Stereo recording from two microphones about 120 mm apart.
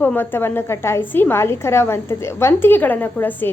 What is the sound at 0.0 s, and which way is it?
A woman's voice, 15° left (ahead or behind).